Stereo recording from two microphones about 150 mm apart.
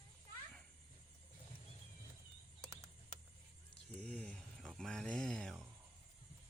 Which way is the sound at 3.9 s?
10° left (ahead or behind).